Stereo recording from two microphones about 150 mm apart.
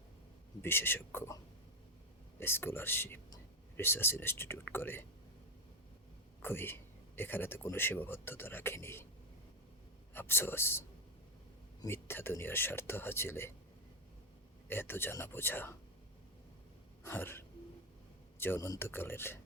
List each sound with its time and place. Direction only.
0.6 s speech: 15° left (ahead or behind)
2.4 s speech: 15° left (ahead or behind)
6.4 s speech: 15° left (ahead or behind)
10.2 s speech: 15° left (ahead or behind)
14.7 s speech: 15° left (ahead or behind)
17.0 s speech: 15° left (ahead or behind)